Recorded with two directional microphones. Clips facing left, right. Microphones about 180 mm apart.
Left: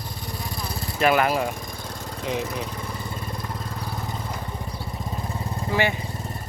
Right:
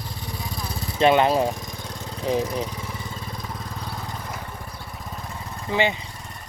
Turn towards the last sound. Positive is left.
turn(degrees=-20)  # may be behind; listen again after turning